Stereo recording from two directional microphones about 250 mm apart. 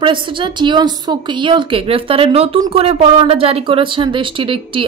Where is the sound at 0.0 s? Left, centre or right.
Centre.